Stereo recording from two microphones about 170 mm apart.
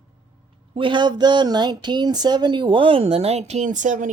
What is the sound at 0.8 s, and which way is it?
Speech, 30° right (ahead or behind).